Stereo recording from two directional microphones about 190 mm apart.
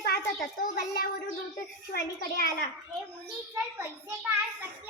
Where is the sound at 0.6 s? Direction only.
50° left (ahead or behind).